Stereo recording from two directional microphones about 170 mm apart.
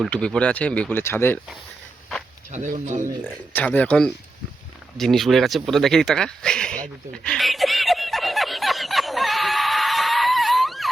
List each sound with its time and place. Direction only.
0.1 s speech: 5° left (ahead or behind)
2.5 s speech: 45° right (ahead or behind)
3.5 s speech: 10° left (ahead or behind)
4.9 s a sound: centre (ahead or behind)